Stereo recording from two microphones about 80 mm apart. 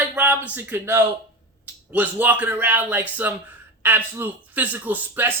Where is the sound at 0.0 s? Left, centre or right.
Centre.